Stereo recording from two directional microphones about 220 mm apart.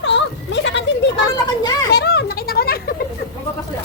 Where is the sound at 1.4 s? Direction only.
20° left (ahead or behind).